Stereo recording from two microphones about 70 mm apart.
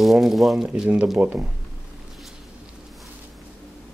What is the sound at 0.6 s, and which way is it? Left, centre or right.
Speech, centre.